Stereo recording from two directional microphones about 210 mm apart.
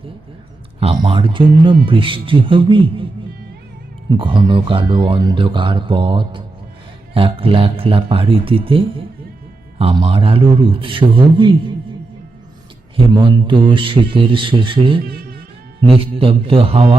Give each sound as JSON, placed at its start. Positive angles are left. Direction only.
{"t": 0.8, "sound": "speech", "side_deg": -25}
{"t": 4.2, "sound": "speech", "side_deg": -25}
{"t": 13.1, "sound": "speech", "side_deg": -25}